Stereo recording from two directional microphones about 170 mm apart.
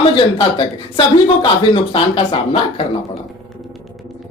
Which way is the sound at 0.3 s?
25° left (ahead or behind).